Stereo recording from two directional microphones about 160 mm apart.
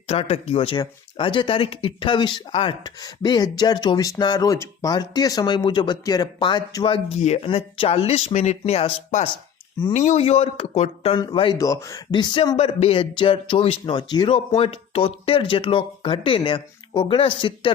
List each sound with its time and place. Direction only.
0.1 s speech: 40° left (ahead or behind)
11.5 s speech: 20° left (ahead or behind)